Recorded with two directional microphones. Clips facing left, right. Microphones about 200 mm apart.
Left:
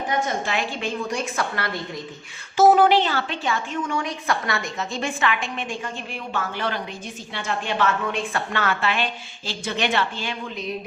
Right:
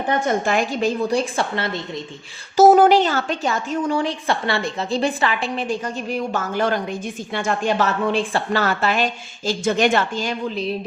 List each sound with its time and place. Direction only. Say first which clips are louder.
0.3 s a woman's voice: right 6 dB; 50° right (ahead or behind); by 1.8 s 25° right (ahead or behind)
2.6 s a woman's voice: right 4 dB; 45° right (ahead or behind)